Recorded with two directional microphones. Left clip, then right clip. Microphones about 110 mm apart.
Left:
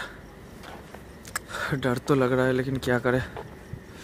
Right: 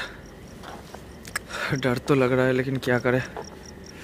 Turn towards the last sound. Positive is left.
turn(degrees=15)  # may be behind; listen again after turning